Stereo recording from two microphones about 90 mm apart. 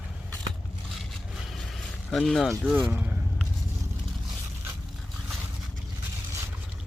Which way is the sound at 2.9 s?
15° right (ahead or behind).